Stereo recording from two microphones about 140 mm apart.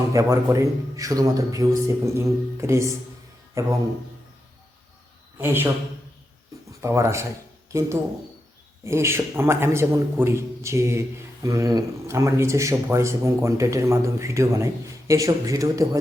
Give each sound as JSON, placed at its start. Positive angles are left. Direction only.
{"t": 0.1, "sound": "speech", "side_deg": -25}
{"t": 5.4, "sound": "a man's voice", "side_deg": -15}
{"t": 6.8, "sound": "speech", "side_deg": -20}